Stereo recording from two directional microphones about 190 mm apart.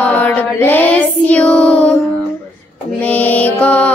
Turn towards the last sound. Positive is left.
turn(degrees=5)  # may be behind; listen again after turning